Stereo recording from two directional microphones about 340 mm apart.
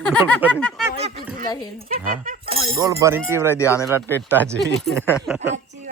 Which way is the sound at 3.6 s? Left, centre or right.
Centre.